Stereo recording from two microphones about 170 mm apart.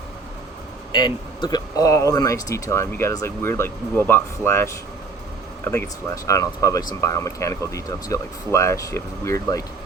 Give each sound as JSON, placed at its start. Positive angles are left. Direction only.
{"t": 0.9, "sound": "speech", "side_deg": 25}